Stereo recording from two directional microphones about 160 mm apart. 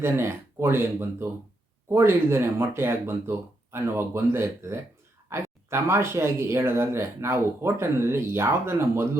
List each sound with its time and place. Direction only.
0.0 s speech: 15° right (ahead or behind)